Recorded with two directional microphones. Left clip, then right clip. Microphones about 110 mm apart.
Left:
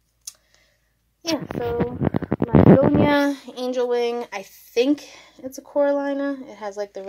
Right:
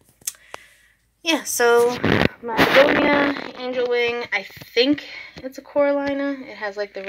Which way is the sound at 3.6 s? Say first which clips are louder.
Even; 45° left (ahead or behind).